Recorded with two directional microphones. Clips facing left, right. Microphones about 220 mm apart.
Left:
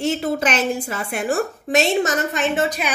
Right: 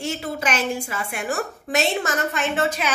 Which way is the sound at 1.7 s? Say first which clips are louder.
Left 4 dB; 20° left (ahead or behind).